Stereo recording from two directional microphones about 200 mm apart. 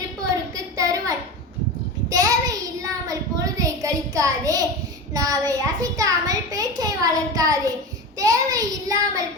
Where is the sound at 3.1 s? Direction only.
15° right (ahead or behind).